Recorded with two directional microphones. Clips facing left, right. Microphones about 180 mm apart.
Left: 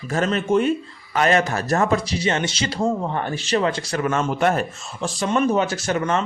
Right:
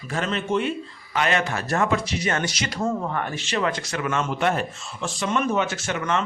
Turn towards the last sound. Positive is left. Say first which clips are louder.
# left 4 dB
turn(degrees=40)  # may be behind; listen again after turning